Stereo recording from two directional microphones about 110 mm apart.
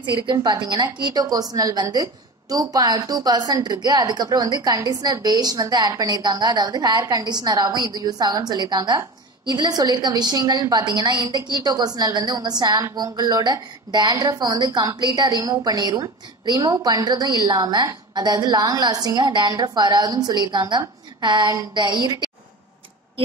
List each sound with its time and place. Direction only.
0.0 s a woman's voice: 45° right (ahead or behind)